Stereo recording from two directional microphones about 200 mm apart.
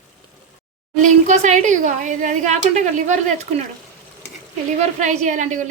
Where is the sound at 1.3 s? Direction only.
35° right (ahead or behind).